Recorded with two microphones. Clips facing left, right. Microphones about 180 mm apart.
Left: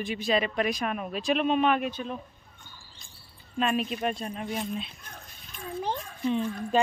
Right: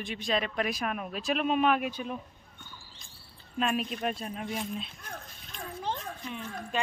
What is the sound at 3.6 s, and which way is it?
Speech, centre (ahead or behind).